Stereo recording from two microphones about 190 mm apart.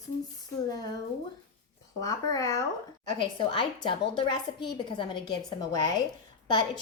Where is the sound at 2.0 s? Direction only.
20° left (ahead or behind).